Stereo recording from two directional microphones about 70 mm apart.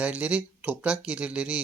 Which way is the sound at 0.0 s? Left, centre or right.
Centre.